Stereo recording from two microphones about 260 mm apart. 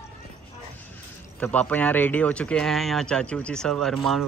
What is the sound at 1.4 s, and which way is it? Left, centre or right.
Speech, centre.